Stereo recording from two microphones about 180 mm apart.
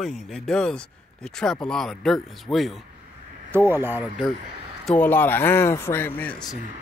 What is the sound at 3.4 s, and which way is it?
Speech, 10° right (ahead or behind).